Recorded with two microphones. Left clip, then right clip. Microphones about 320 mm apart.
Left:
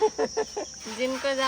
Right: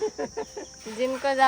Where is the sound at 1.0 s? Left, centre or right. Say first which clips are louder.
Right 4 dB; right.